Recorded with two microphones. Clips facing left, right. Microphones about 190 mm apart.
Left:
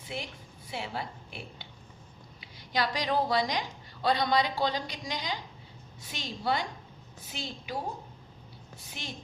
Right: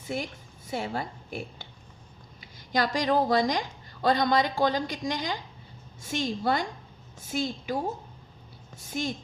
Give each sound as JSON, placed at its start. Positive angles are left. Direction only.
{"t": 0.1, "sound": "a woman's voice", "side_deg": -45}
{"t": 8.8, "sound": "a woman's voice", "side_deg": -45}